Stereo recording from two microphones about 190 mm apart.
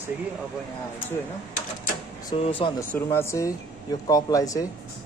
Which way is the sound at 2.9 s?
15° left (ahead or behind).